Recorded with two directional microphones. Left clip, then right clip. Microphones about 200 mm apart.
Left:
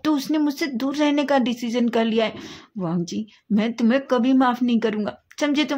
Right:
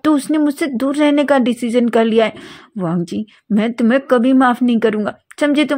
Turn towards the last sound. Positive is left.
turn(degrees=-25)  # may be behind; listen again after turning